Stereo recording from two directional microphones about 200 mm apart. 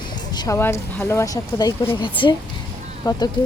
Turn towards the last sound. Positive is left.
turn(degrees=20)  # may be behind; listen again after turning